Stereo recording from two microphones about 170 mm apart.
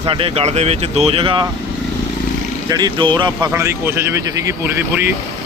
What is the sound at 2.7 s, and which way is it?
Speech, 25° right (ahead or behind).